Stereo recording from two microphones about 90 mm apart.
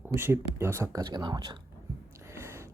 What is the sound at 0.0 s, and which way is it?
Speech, 25° right (ahead or behind).